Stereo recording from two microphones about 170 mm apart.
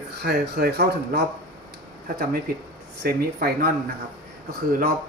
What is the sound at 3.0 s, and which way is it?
Speech, 65° right (ahead or behind).